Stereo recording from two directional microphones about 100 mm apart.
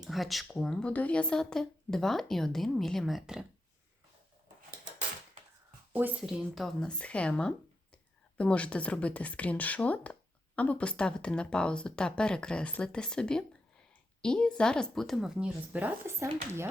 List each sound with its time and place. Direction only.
0.0 s a woman's voice: centre (ahead or behind)
5.9 s speech: 20° right (ahead or behind)
6.2 s a woman's voice: centre (ahead or behind)
16.0 s speech: 25° right (ahead or behind)